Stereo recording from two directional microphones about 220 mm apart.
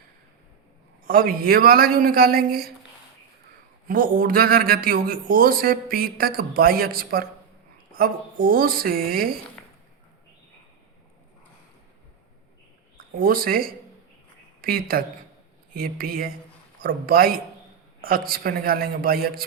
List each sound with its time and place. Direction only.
1.0 s speech: 40° right (ahead or behind)
3.8 s speech: 40° right (ahead or behind)
13.1 s speech: 40° right (ahead or behind)